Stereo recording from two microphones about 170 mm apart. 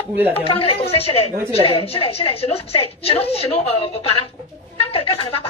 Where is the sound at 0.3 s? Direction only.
35° left (ahead or behind).